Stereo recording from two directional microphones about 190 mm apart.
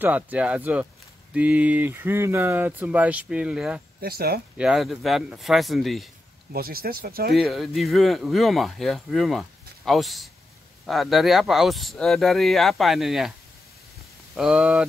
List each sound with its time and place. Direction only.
0.0 s speech: 10° right (ahead or behind)
4.0 s speech: 55° right (ahead or behind)
4.6 s speech: centre (ahead or behind)
6.5 s speech: 50° right (ahead or behind)
7.3 s speech: centre (ahead or behind)
14.3 s speech: centre (ahead or behind)